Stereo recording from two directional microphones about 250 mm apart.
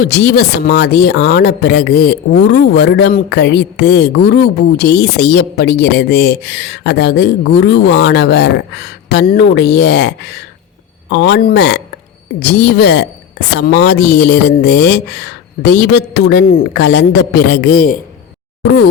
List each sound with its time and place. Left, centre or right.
0.0 s a woman's voice: left